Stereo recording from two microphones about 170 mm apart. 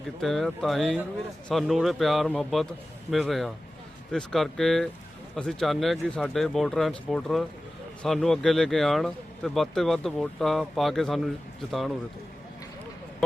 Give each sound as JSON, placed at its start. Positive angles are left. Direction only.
{"t": 0.2, "sound": "speech", "side_deg": 0}